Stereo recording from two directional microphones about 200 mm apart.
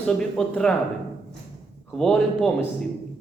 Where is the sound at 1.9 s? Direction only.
Centre (ahead or behind).